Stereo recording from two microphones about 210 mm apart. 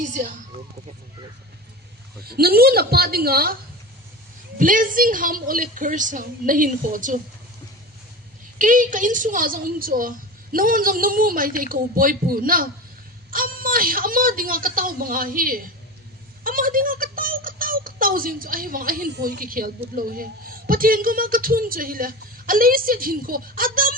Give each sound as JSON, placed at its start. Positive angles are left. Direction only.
{"t": 0.0, "sound": "a woman's voice", "side_deg": -35}
{"t": 2.2, "sound": "a man's voice", "side_deg": -45}
{"t": 4.5, "sound": "a woman's voice", "side_deg": -40}
{"t": 8.5, "sound": "a woman's voice", "side_deg": -40}